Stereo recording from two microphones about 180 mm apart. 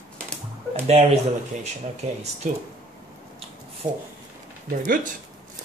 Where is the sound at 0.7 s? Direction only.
35° right (ahead or behind).